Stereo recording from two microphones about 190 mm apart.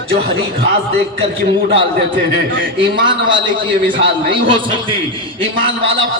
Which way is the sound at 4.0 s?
25° right (ahead or behind).